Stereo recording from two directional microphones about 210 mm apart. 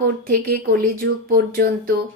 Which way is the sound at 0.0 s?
45° right (ahead or behind).